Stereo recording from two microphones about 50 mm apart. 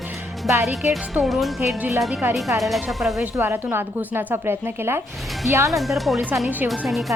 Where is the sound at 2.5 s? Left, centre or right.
Right.